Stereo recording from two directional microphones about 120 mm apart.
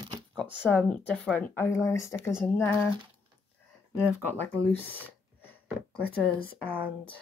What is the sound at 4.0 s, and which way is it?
Speech, 15° left (ahead or behind).